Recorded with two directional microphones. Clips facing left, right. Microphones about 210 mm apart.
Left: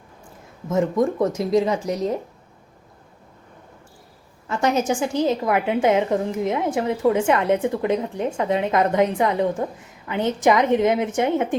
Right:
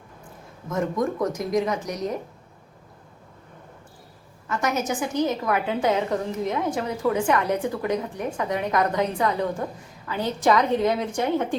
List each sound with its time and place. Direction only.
0.7 s a woman's voice: 25° left (ahead or behind)
4.4 s a woman's voice: 30° left (ahead or behind)